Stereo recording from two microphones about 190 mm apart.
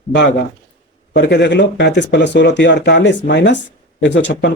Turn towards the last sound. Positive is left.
turn(degrees=65)  # may be behind; listen again after turning